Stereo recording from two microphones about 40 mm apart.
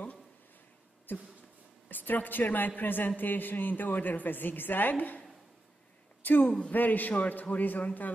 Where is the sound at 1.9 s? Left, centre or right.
Left.